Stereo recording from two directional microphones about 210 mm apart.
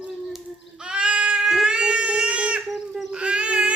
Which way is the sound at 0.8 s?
5° right (ahead or behind).